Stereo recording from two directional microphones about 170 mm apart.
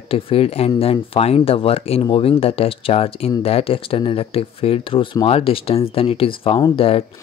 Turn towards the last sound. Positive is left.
turn(degrees=35)  # may be behind; listen again after turning